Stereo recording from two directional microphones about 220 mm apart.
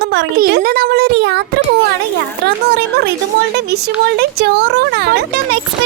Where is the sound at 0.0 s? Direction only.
50° right (ahead or behind).